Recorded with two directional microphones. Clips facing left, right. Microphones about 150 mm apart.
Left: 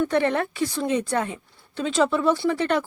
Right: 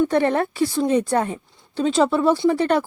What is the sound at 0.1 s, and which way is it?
A woman's voice, 35° right (ahead or behind).